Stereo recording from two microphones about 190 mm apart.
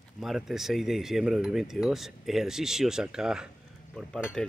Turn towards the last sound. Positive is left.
turn(degrees=0)  # may be behind; listen again after turning